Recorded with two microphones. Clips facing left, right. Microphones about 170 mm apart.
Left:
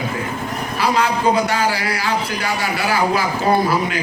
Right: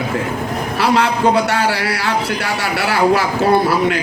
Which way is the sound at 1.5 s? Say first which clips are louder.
Right 2 dB; 70° right (ahead or behind).